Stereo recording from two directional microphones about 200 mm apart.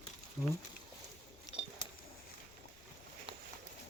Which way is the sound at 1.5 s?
20° left (ahead or behind).